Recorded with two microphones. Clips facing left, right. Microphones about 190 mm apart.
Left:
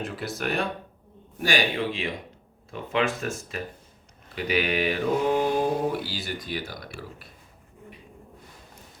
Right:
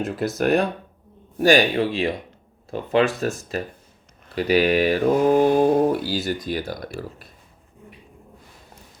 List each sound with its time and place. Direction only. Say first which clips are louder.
0.0 s speech: right 8 dB; 45° right (ahead or behind)